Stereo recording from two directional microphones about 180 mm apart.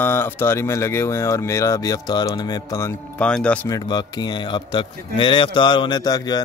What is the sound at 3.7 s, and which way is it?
A man's voice, 20° left (ahead or behind).